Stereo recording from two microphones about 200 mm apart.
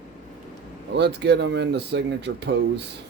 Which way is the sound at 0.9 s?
60° right (ahead or behind).